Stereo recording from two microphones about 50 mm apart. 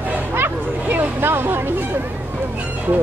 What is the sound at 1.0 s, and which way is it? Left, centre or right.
Speech, right.